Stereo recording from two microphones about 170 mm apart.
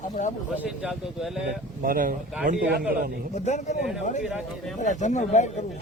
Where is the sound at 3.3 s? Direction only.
45° left (ahead or behind).